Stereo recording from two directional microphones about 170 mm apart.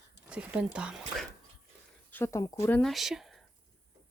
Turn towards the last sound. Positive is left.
turn(degrees=0)  # may be behind; listen again after turning